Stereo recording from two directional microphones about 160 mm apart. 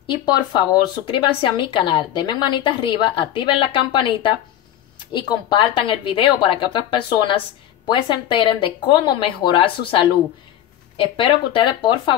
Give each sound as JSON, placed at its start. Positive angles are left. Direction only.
{"t": 0.0, "sound": "speech", "side_deg": 30}
{"t": 11.0, "sound": "speech", "side_deg": 30}